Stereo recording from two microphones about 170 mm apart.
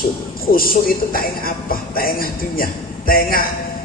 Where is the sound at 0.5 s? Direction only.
60° left (ahead or behind).